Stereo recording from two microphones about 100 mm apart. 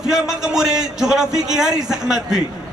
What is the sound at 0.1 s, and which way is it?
A man's voice, 5° right (ahead or behind).